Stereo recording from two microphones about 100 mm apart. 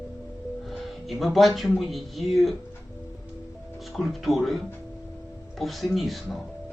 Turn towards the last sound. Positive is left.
turn(degrees=0)  # may be behind; listen again after turning